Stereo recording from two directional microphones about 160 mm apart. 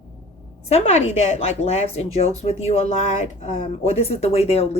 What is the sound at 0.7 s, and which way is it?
Speech, 40° left (ahead or behind).